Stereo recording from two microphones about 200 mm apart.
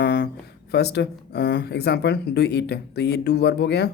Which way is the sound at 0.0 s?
55° left (ahead or behind).